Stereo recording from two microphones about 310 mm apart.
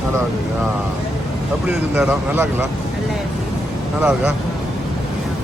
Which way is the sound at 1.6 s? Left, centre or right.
Centre.